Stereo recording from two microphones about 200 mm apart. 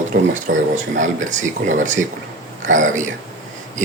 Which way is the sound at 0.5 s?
60° right (ahead or behind).